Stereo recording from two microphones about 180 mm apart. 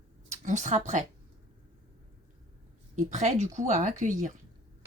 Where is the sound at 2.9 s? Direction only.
40° right (ahead or behind).